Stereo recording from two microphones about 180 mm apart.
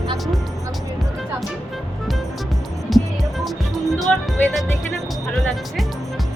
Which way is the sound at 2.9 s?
Centre (ahead or behind).